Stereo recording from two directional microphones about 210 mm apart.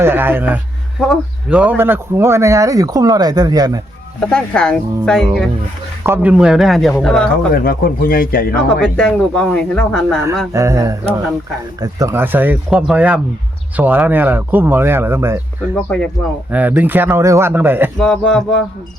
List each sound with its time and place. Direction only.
0.0 s speech: 10° right (ahead or behind)
4.3 s speech: 5° left (ahead or behind)
6.0 s speech: 10° right (ahead or behind)
7.5 s speech: 45° left (ahead or behind)
8.8 s speech: 5° left (ahead or behind)
10.5 s speech: 15° right (ahead or behind)
15.7 s speech: 5° left (ahead or behind)
16.5 s speech: 10° right (ahead or behind)
17.9 s speech: 5° left (ahead or behind)